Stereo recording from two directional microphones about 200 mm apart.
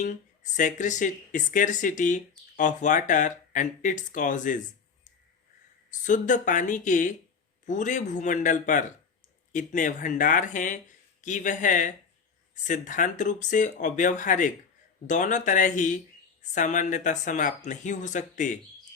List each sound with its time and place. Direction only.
0.0 s speech: 40° left (ahead or behind)
6.1 s speech: 40° left (ahead or behind)